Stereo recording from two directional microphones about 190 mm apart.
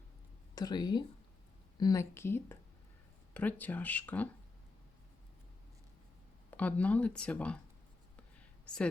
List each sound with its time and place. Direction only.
0.5 s speech: 20° left (ahead or behind)
6.5 s speech: 10° left (ahead or behind)